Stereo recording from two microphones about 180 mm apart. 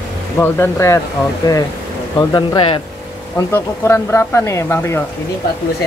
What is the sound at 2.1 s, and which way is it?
Speech, 25° left (ahead or behind).